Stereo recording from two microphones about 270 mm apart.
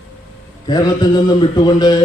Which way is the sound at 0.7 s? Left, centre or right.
Centre.